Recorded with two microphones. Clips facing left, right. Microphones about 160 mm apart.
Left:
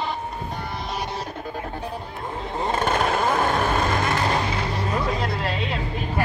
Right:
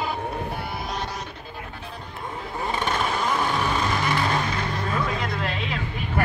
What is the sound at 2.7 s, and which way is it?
Vehicle, 45° left (ahead or behind).